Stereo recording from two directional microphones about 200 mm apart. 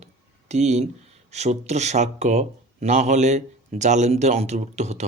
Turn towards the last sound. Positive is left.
turn(degrees=-35)  # may be behind; listen again after turning